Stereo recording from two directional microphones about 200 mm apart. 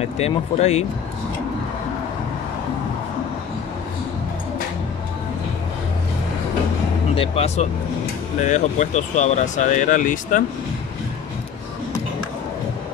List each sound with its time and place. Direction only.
0.0 s speech: 30° left (ahead or behind)
7.2 s speech: 30° left (ahead or behind)